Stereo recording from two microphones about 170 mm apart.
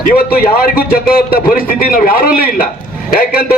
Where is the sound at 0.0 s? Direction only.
60° left (ahead or behind).